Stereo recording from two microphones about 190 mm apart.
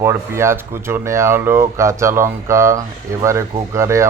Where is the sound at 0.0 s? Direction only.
15° right (ahead or behind).